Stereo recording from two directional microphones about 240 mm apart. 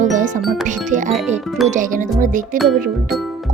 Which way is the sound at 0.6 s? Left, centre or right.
Right.